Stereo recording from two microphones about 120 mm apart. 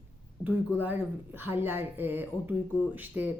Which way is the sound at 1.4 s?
20° right (ahead or behind).